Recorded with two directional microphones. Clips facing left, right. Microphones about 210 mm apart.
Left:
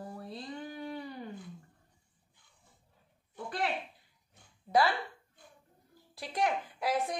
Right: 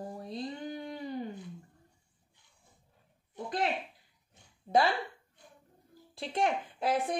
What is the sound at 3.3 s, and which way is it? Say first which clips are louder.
Speech: right 2 dB; 20° right (ahead or behind).